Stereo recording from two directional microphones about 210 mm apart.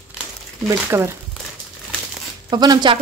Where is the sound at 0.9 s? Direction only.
10° right (ahead or behind).